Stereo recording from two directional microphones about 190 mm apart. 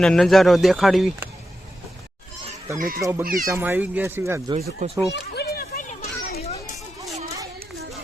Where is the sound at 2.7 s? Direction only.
50° right (ahead or behind).